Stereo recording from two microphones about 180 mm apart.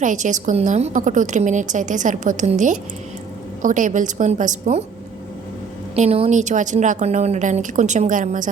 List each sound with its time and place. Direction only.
0.0 s a woman's voice: 45° right (ahead or behind)
6.0 s a woman's voice: 35° right (ahead or behind)